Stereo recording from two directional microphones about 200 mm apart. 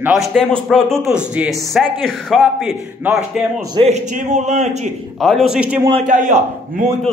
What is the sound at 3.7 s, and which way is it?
A man's voice, 35° right (ahead or behind).